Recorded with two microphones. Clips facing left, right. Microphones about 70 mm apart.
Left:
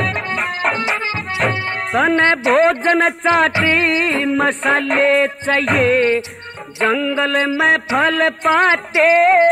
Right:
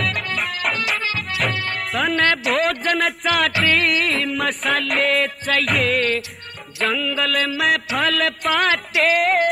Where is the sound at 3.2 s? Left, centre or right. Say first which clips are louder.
Left 6 dB; left.